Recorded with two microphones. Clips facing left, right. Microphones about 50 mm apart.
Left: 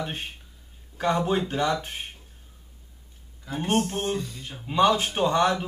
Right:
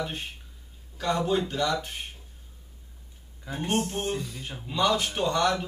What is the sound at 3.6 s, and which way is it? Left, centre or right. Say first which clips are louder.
Speech: left 3 dB; left.